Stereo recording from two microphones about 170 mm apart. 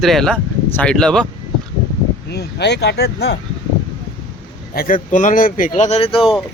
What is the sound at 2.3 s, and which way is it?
Speech, 80° left.